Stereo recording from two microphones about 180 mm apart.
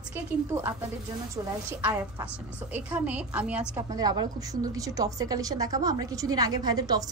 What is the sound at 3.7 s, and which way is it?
A woman's voice, 20° right (ahead or behind).